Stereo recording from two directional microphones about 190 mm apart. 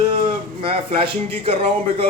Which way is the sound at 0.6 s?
30° right (ahead or behind).